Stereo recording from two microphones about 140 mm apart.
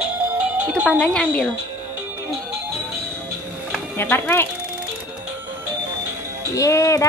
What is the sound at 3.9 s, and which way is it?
Speech, 15° left (ahead or behind).